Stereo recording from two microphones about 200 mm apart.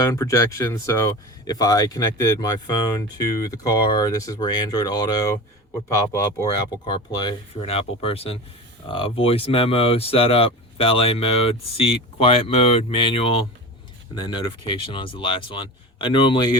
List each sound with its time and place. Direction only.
0.0 s speech: 15° left (ahead or behind)